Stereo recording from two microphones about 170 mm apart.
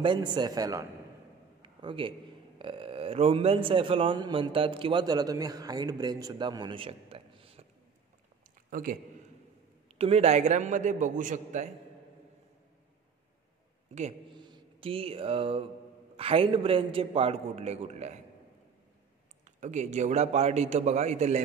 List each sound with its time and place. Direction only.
0.0 s a man's voice: 25° right (ahead or behind)
1.6 s a sound: 30° right (ahead or behind)
2.6 s a man's voice: 30° right (ahead or behind)
8.6 s a sound: 55° right (ahead or behind)
9.9 s a man's voice: 40° right (ahead or behind)
13.9 s a man's voice: 40° right (ahead or behind)
14.3 s a sound: 25° right (ahead or behind)
16.2 s a man's voice: 35° right (ahead or behind)
19.4 s a man's voice: 45° right (ahead or behind)